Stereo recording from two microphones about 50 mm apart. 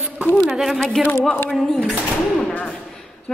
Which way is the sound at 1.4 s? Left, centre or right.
Centre.